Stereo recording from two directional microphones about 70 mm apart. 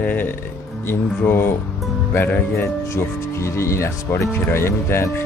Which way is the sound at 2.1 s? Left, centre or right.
Left.